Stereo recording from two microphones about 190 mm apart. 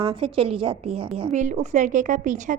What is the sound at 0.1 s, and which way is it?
A woman's voice, 25° right (ahead or behind).